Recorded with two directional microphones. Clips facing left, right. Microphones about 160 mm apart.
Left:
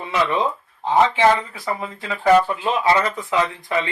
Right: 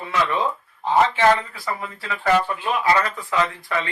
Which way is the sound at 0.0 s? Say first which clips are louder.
Left 2 dB; 20° left (ahead or behind).